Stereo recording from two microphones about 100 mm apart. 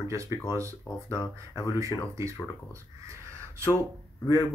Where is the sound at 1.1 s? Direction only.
35° left (ahead or behind).